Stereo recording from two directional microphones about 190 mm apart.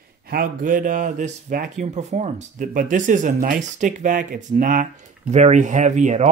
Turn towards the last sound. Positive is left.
turn(degrees=-40)  # may be behind; listen again after turning